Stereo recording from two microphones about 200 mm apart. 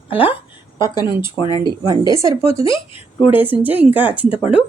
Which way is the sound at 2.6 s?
25° left (ahead or behind).